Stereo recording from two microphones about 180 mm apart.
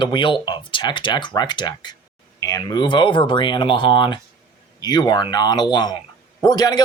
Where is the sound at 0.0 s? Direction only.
25° left (ahead or behind).